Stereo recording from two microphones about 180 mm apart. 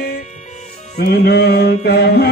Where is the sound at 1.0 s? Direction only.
60° left (ahead or behind).